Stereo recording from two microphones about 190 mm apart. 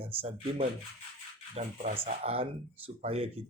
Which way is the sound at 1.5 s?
40° right (ahead or behind).